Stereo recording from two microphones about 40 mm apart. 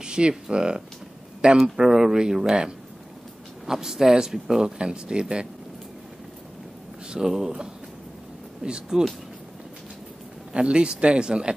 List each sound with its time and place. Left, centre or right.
0.0 s speech: right
1.8 s speech: centre
3.6 s speech: centre
7.1 s speech: centre
8.6 s speech: centre
10.5 s speech: right